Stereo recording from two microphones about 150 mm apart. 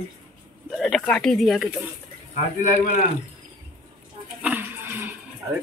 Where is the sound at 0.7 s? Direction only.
Centre (ahead or behind).